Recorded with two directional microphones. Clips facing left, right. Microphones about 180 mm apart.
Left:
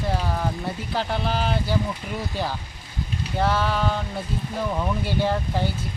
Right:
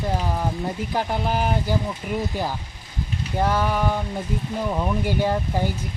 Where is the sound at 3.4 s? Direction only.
15° right (ahead or behind).